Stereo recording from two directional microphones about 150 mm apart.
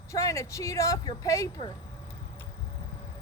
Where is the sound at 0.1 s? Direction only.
20° left (ahead or behind).